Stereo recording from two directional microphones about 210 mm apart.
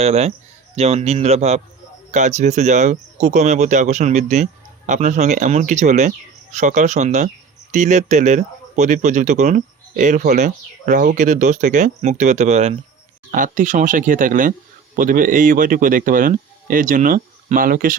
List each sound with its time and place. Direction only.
0.0 s speech: 30° right (ahead or behind)